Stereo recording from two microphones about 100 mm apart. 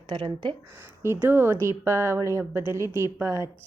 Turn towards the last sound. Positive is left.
turn(degrees=-25)  # may be behind; listen again after turning